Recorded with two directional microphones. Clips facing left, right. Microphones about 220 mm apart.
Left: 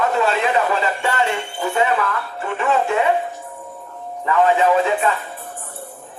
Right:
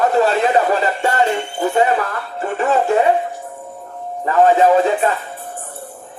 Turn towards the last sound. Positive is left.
turn(degrees=-40)  # may be behind; listen again after turning